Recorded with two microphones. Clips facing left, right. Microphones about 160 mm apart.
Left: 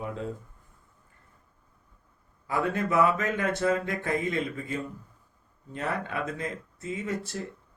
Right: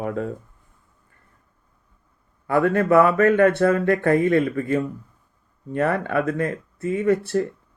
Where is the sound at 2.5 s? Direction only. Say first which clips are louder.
Right 10 dB; 60° right (ahead or behind).